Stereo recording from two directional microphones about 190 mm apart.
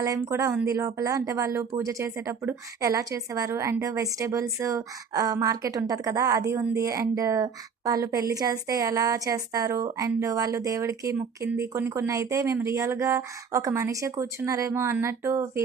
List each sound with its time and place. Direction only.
0.0 s speech: 15° right (ahead or behind)